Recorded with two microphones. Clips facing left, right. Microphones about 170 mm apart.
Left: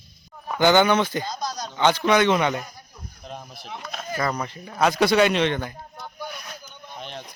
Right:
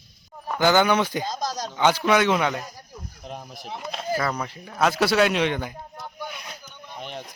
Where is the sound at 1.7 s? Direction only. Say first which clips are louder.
Left 1 dB; 10° right (ahead or behind).